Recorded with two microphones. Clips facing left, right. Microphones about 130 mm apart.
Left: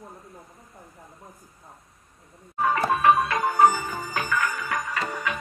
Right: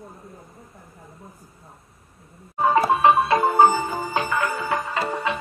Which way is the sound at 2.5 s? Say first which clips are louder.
Right 5 dB; 25° right (ahead or behind).